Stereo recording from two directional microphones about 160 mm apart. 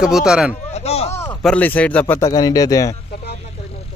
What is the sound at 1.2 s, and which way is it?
Speech, 5° left (ahead or behind).